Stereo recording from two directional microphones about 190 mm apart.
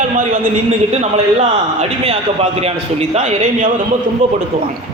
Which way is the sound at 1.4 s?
35° right (ahead or behind).